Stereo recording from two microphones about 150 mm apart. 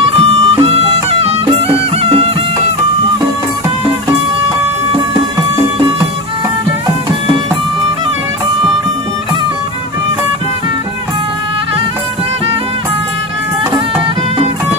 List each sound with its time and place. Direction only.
0.0 s music: 40° right (ahead or behind)